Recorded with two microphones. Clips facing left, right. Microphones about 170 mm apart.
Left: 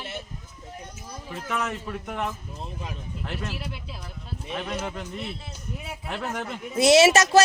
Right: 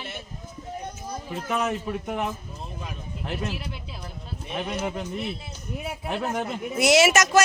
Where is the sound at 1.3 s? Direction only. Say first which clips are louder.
Right 3 dB; 20° right (ahead or behind).